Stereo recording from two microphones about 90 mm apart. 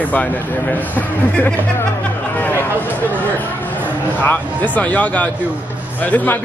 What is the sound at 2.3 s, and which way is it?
Chatter, 20° left (ahead or behind).